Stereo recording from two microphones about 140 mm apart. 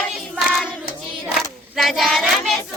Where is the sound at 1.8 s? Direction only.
Centre (ahead or behind).